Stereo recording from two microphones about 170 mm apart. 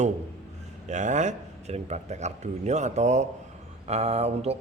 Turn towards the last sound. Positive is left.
turn(degrees=-40)  # may be behind; listen again after turning